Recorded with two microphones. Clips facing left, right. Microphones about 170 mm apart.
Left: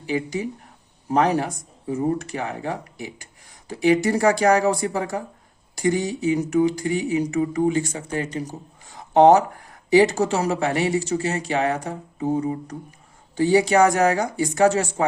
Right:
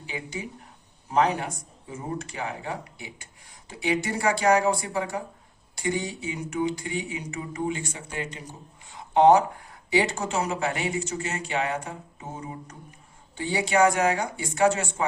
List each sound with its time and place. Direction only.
1.4 s speech: 40° left (ahead or behind)